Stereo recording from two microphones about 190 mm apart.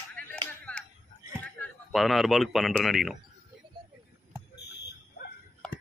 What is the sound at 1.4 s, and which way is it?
Speech, 5° left (ahead or behind).